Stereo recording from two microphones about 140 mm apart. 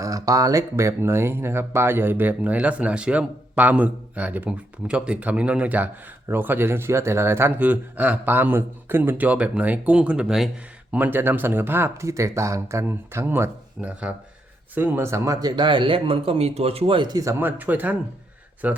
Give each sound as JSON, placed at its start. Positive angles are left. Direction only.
{"t": 0.0, "sound": "speech", "side_deg": -25}
{"t": 10.9, "sound": "speech", "side_deg": -15}
{"t": 17.4, "sound": "speech", "side_deg": -10}